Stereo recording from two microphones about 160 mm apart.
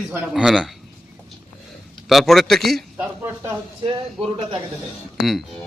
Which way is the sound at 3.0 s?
15° right (ahead or behind).